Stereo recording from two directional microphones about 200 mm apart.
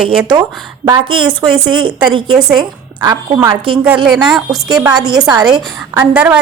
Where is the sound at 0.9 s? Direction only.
25° right (ahead or behind).